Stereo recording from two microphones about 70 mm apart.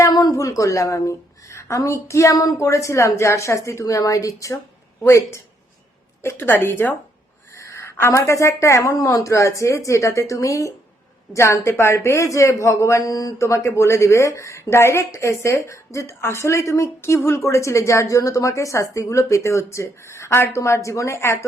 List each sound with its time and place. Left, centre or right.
0.1 s a woman's voice: left
6.2 s a woman's voice: left
7.6 s a sound: left
8.1 s a woman's voice: left
13.0 s speech: left
13.4 s a woman's voice: left